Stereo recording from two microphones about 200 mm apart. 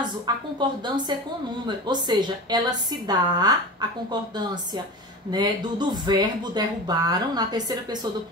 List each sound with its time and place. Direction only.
0.6 s speech: 20° right (ahead or behind)
5.3 s speech: 20° right (ahead or behind)